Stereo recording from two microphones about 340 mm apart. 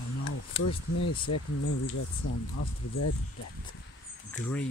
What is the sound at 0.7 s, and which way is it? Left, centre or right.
Speech, left.